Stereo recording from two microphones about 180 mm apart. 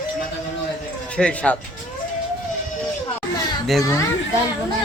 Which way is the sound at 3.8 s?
15° left (ahead or behind).